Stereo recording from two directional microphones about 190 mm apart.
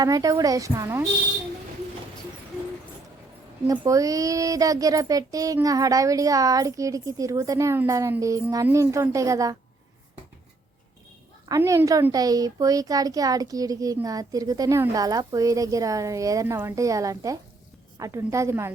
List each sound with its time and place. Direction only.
0.0 s a child's voice: 20° right (ahead or behind)
3.7 s a child's voice: 15° right (ahead or behind)
11.4 s a child's voice: 15° right (ahead or behind)